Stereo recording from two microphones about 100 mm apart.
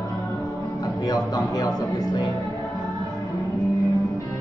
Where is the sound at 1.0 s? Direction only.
35° left (ahead or behind).